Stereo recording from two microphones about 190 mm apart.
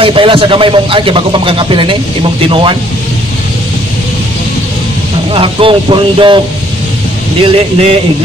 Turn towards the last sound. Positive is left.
turn(degrees=-30)  # may be behind; listen again after turning